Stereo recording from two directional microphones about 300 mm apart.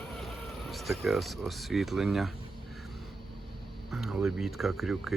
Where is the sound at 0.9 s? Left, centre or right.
Centre.